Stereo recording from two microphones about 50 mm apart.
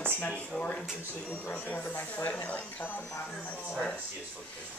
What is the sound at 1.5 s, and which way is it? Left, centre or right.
Speech, left.